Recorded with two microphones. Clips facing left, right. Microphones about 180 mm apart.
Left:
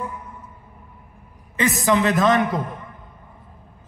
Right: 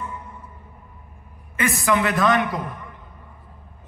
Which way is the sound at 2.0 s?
25° left (ahead or behind).